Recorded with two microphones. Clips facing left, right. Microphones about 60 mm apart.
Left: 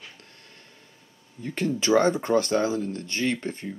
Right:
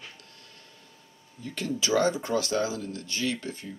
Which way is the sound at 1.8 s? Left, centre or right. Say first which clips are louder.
Left 4 dB; left.